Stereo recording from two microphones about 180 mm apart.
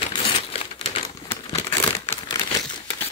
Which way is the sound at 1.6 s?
10° left (ahead or behind).